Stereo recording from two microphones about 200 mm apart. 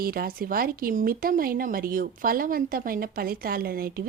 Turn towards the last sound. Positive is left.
turn(degrees=-50)  # may be behind; listen again after turning